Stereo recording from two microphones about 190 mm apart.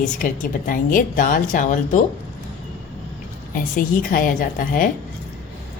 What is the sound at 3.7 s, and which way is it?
A woman's voice, 45° left (ahead or behind).